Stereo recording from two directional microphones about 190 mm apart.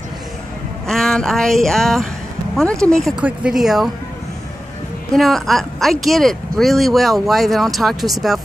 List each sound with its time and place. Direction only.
0.8 s speech: centre (ahead or behind)
5.1 s speech: centre (ahead or behind)